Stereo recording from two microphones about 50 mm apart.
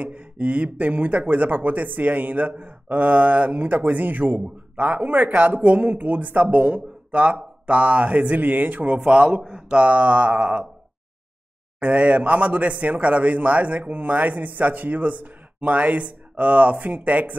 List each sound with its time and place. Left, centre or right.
0.0 s speech: right
11.8 s speech: right